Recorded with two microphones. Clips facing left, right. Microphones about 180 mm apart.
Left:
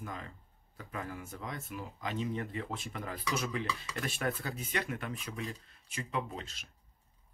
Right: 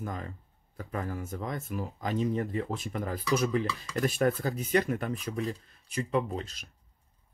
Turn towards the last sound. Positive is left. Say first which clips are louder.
# right 6 dB
turn(degrees=-40)  # may be behind; listen again after turning